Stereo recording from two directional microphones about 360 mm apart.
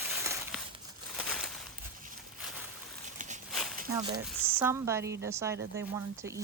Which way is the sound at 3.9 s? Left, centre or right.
Centre.